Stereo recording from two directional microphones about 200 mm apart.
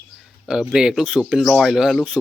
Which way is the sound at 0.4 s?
5° right (ahead or behind).